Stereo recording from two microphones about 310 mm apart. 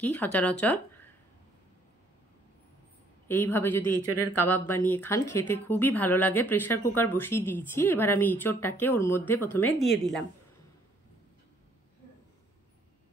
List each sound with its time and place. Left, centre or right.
0.0 s speech: centre
3.3 s a woman's voice: centre
3.9 s speech: left
4.5 s a woman's voice: centre